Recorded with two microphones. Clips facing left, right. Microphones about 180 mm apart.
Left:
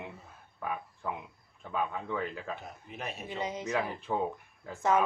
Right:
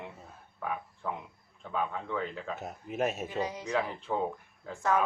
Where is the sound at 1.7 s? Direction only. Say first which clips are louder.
Even; 5° left (ahead or behind).